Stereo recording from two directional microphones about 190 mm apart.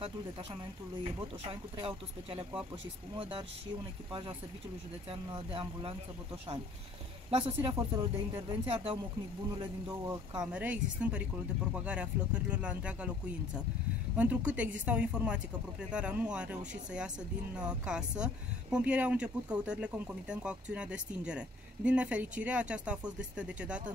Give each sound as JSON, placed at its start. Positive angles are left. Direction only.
{"t": 1.0, "sound": "speech", "side_deg": -25}
{"t": 7.2, "sound": "speech", "side_deg": -30}
{"t": 10.4, "sound": "speech", "side_deg": -5}